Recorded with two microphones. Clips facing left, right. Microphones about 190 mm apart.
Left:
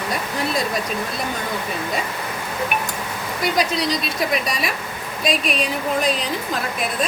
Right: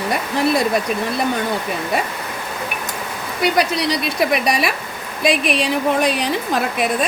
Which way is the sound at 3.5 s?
65° right (ahead or behind).